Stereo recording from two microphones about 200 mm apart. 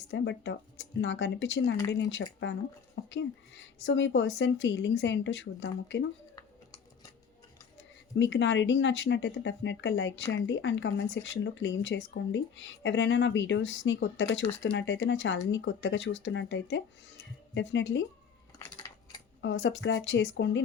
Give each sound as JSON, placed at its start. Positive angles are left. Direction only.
{"t": 0.1, "sound": "speech", "side_deg": 65}
{"t": 8.2, "sound": "speech", "side_deg": 65}
{"t": 19.4, "sound": "speech", "side_deg": 70}